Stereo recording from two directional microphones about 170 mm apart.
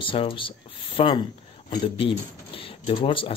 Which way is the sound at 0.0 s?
30° left (ahead or behind).